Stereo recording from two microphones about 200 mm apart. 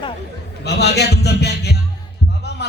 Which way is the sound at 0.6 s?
55° left (ahead or behind).